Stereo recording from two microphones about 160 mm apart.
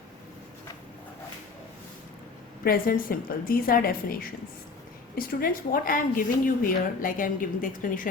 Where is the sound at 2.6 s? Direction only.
65° left (ahead or behind).